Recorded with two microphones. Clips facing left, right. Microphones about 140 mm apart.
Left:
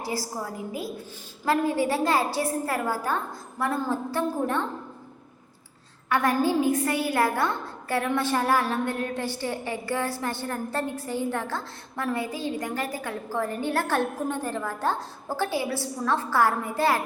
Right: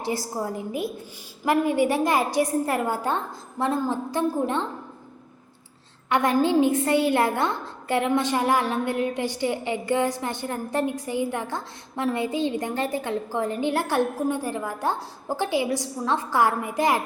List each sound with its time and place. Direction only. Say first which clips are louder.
0.0 s a woman's voice: right 3 dB; 20° right (ahead or behind)
6.1 s a woman's voice: right 2 dB; 20° right (ahead or behind)